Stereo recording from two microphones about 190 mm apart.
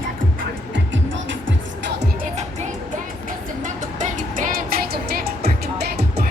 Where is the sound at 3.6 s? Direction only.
40° right (ahead or behind); by 6.3 s 60° right (ahead or behind).